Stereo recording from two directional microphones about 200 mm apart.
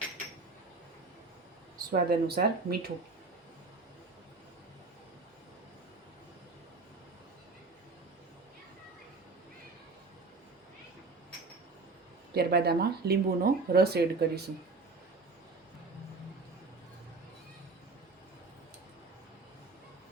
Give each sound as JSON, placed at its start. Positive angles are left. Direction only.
{"t": 1.9, "sound": "speech", "side_deg": -50}
{"t": 12.3, "sound": "speech", "side_deg": -50}